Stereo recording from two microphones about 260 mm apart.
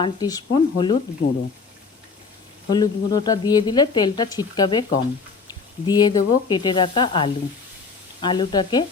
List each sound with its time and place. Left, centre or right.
0.0 s a woman's voice: centre
1.2 s speech: left
2.6 s a woman's voice: centre